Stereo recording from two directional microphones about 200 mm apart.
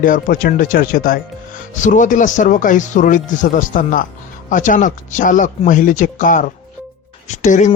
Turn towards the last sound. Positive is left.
turn(degrees=35)  # may be behind; listen again after turning